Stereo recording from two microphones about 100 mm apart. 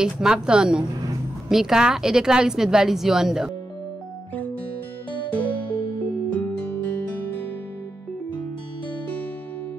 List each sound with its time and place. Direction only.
0.0 s a woman's voice: 5° right (ahead or behind)
5.3 s music: 15° left (ahead or behind)